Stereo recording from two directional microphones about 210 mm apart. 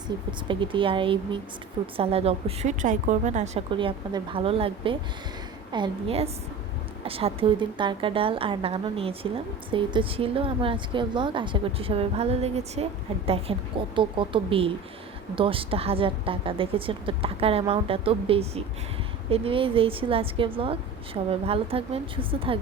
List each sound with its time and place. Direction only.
0.1 s speech: 20° right (ahead or behind)